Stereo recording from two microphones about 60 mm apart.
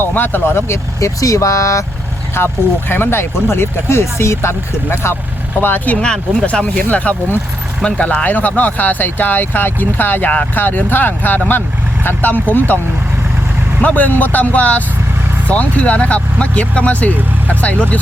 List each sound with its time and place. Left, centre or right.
0.0 s speech: left
0.9 s speech: left
2.4 s speech: left
5.6 s speech: left
6.0 s speech: centre
13.8 s speech: left